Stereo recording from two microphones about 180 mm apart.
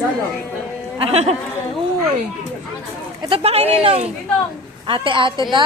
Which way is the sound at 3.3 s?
35° right (ahead or behind).